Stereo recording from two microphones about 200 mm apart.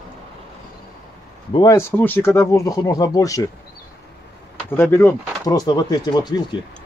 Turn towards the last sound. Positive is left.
turn(degrees=20)  # may be behind; listen again after turning